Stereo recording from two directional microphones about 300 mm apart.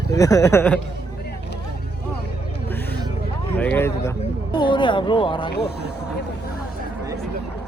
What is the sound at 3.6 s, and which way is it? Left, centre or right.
Speech, centre.